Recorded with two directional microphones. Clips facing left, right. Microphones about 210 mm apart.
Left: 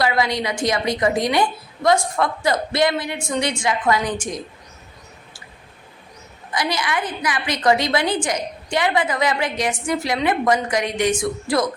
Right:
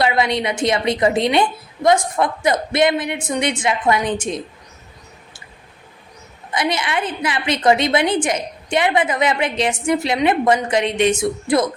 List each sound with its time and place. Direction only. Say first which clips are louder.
0.0 s a woman's voice: right 2 dB; 25° right (ahead or behind)
6.5 s a woman's voice: right 2 dB; 25° right (ahead or behind)